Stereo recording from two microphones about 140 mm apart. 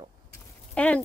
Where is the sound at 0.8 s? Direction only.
10° left (ahead or behind).